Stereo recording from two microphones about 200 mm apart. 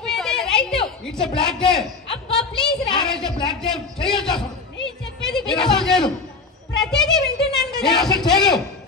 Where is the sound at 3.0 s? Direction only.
5° left (ahead or behind).